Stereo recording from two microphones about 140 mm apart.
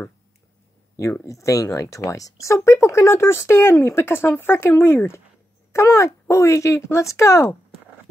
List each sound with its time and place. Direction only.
0.9 s speech: 20° left (ahead or behind)